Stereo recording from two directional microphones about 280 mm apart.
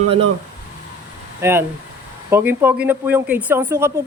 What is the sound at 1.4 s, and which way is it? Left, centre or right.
A man's voice, centre.